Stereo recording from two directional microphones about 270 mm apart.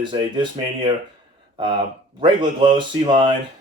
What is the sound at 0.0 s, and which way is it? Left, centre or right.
Speech, centre.